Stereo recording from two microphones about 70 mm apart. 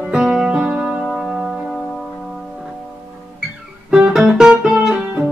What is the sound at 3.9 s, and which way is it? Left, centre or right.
Guitar, centre.